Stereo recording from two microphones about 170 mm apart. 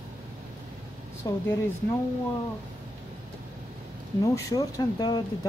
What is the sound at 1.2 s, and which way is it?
Speech, 20° left (ahead or behind).